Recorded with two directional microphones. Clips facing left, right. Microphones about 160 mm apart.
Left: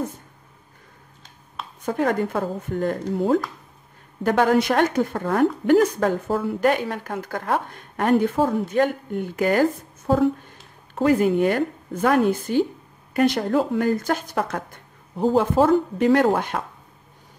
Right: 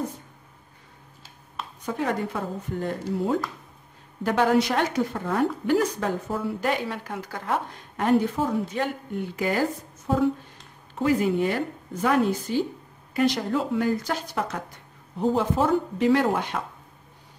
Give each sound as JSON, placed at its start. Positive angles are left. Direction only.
{"t": 1.9, "sound": "speech", "side_deg": 50}
{"t": 4.2, "sound": "a woman's voice", "side_deg": 50}
{"t": 11.0, "sound": "speech", "side_deg": 50}